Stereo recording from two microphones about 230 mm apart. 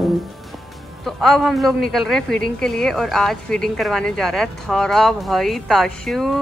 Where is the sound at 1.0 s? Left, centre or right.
Centre.